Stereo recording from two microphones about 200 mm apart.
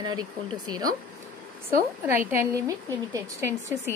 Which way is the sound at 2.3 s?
15° right (ahead or behind).